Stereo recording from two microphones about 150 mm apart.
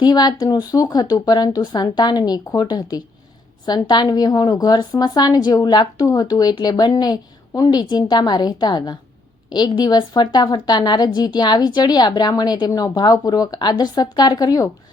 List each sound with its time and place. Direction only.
0.0 s a woman's voice: 25° left (ahead or behind)